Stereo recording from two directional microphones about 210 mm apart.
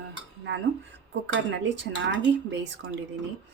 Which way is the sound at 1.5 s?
60° right (ahead or behind).